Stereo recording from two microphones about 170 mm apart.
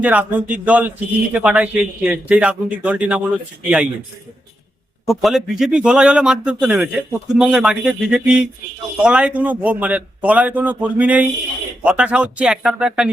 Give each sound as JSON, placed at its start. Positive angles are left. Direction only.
{"t": 0.0, "sound": "a man's voice", "side_deg": -10}
{"t": 5.0, "sound": "a man's voice", "side_deg": 0}